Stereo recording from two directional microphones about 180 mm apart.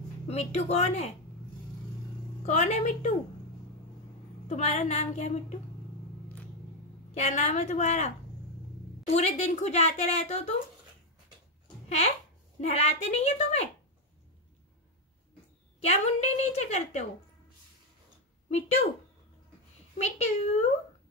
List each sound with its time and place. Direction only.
0.3 s a woman's voice: 35° left (ahead or behind)
2.4 s a woman's voice: 40° left (ahead or behind)
4.5 s a woman's voice: 40° left (ahead or behind)
7.2 s a woman's voice: 40° left (ahead or behind)
9.1 s a woman's voice: 35° left (ahead or behind)
12.5 s a woman's voice: 35° left (ahead or behind)
15.8 s a woman's voice: 40° left (ahead or behind)
18.5 s a woman's voice: 35° left (ahead or behind)
20.0 s a woman's voice: 35° left (ahead or behind)